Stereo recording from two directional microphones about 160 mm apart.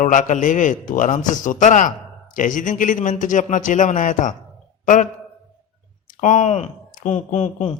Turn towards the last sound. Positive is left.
turn(degrees=45)  # may be behind; listen again after turning